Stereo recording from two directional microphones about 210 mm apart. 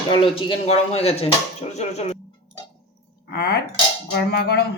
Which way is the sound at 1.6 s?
30° left (ahead or behind).